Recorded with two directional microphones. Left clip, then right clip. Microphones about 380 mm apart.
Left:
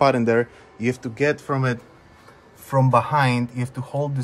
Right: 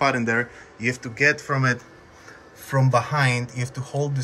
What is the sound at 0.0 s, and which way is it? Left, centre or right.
Speech, centre.